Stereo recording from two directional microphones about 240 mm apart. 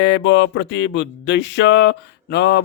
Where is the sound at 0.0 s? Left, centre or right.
Left.